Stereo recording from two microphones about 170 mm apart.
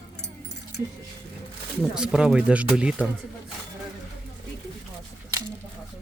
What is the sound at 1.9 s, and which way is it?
Speech, 5° right (ahead or behind).